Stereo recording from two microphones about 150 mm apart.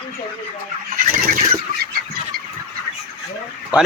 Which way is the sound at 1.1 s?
70° right (ahead or behind).